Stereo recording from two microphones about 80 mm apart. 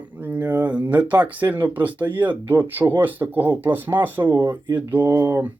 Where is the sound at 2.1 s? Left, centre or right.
Centre.